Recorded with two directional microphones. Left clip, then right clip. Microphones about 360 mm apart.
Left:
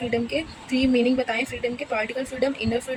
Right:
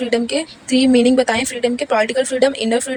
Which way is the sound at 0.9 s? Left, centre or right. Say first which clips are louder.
Right 9 dB; right.